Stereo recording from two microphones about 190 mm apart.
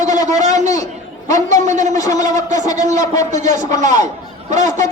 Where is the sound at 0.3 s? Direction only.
40° right (ahead or behind).